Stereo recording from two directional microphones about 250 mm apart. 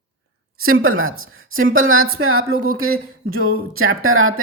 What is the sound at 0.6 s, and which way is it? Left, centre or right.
Speech, right.